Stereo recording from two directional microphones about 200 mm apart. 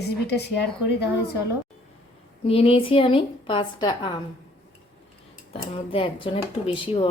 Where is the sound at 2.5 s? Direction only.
30° left (ahead or behind).